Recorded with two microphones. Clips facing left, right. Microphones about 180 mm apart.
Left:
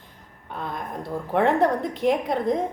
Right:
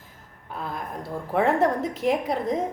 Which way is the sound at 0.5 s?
5° right (ahead or behind).